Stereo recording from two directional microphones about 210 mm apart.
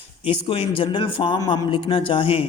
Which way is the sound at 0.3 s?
25° left (ahead or behind).